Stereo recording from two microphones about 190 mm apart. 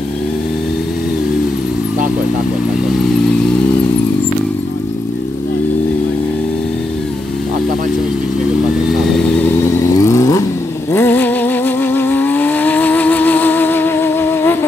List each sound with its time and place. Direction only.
9.9 s vehicle: 15° left (ahead or behind)